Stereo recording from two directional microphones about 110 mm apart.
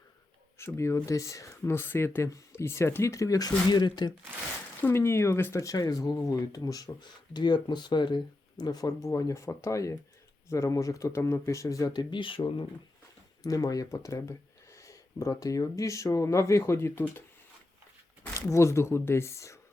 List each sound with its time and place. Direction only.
0.6 s speech: 25° left (ahead or behind)
4.8 s speech: 20° left (ahead or behind)
12.1 s speech: 50° left (ahead or behind)
13.4 s speech: 35° left (ahead or behind)
18.3 s speech: 25° left (ahead or behind)